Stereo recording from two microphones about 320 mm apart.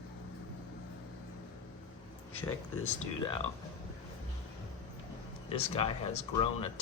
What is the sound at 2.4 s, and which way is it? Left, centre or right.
Speech, centre.